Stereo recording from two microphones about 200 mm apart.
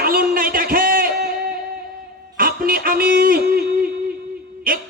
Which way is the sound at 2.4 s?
50° right (ahead or behind).